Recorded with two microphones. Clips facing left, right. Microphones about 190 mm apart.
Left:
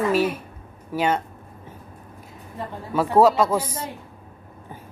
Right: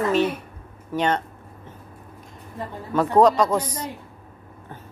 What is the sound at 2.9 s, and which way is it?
A woman's voice, 5° left (ahead or behind).